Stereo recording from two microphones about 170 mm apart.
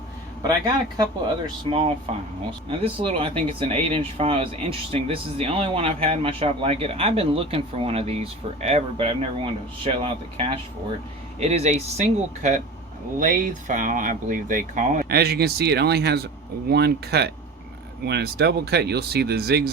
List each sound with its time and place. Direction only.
0.4 s speech: 25° right (ahead or behind)
2.6 s speech: 35° right (ahead or behind); by 19.7 s 70° right (ahead or behind)